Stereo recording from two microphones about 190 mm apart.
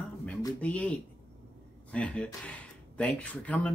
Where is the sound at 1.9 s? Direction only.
5° left (ahead or behind).